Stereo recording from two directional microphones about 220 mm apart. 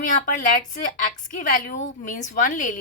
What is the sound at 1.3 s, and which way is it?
Speech, 35° left (ahead or behind).